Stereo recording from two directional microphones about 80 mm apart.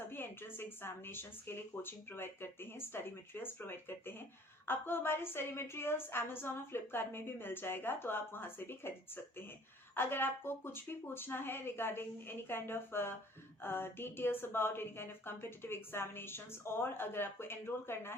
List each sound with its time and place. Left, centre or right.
0.1 s a woman's voice: left